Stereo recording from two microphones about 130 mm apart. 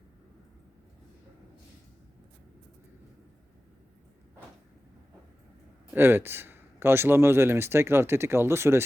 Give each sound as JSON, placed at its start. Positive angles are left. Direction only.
{"t": 5.9, "sound": "speech", "side_deg": -15}